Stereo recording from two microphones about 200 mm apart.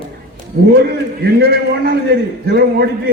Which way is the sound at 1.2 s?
55° right (ahead or behind).